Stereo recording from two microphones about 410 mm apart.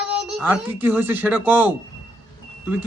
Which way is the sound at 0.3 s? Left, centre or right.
Centre.